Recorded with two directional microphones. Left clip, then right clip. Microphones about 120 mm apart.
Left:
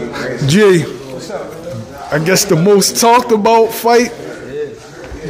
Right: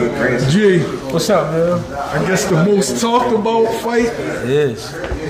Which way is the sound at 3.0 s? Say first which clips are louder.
Left 5 dB; 50° left (ahead or behind).